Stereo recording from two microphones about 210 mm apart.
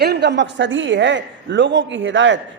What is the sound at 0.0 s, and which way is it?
A man's voice, 50° right (ahead or behind).